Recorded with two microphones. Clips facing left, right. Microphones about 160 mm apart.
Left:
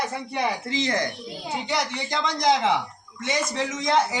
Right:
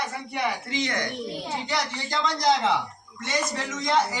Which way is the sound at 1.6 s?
15° left (ahead or behind).